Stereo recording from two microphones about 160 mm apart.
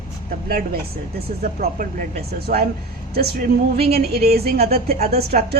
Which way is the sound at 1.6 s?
55° right (ahead or behind).